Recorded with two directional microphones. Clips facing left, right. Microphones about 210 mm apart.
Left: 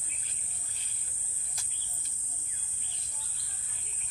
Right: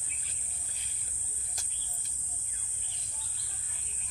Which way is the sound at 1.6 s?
45° right (ahead or behind).